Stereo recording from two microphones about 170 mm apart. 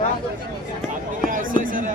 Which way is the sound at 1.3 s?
55° right (ahead or behind).